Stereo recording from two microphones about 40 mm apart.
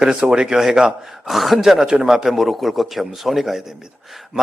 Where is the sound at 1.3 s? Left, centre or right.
Centre.